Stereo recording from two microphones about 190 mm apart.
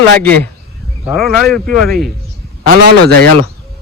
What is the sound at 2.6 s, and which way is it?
Speech, 55° right (ahead or behind).